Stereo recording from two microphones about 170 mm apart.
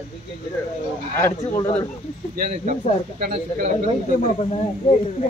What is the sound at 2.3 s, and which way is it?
Speech, 50° right (ahead or behind).